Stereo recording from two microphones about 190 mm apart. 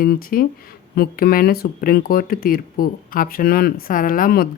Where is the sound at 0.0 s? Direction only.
50° left (ahead or behind).